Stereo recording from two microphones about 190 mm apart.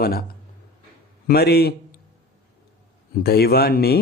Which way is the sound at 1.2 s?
55° left (ahead or behind).